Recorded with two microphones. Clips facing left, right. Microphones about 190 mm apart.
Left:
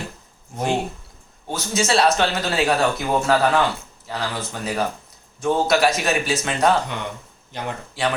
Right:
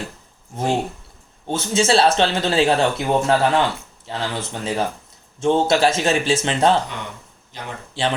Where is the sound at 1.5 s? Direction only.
25° right (ahead or behind).